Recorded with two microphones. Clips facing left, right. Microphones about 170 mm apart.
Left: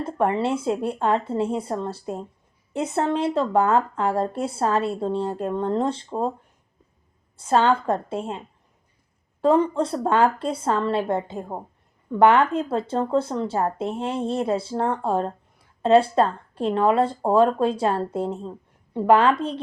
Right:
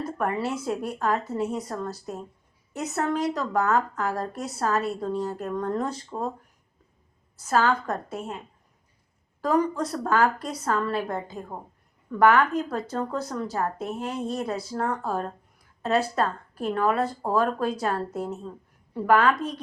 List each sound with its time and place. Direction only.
0.0 s speech: 25° left (ahead or behind)
7.3 s speech: 25° left (ahead or behind)
9.4 s speech: 25° left (ahead or behind)